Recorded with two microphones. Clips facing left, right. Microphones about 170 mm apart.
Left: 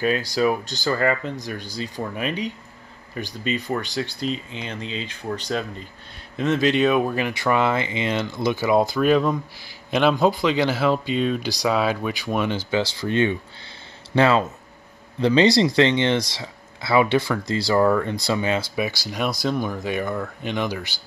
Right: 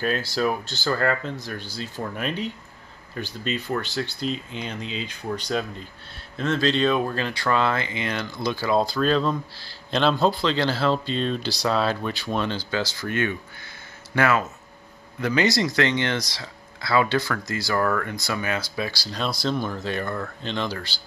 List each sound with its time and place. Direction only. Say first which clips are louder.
0.4 s speech: left 4 dB; centre (ahead or behind)
6.3 s speech: left 3 dB; 15° left (ahead or behind)
17.8 s speech: left 5 dB; 15° left (ahead or behind)
18.1 s speech: left 5 dB; 25° left (ahead or behind)